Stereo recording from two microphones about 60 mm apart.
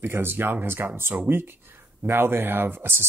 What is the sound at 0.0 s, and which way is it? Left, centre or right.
Speech, right.